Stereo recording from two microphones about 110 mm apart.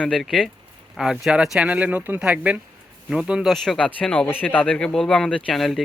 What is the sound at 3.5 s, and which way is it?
Speech, 5° left (ahead or behind).